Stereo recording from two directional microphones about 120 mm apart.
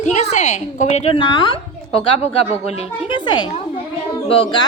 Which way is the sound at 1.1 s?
40° left (ahead or behind).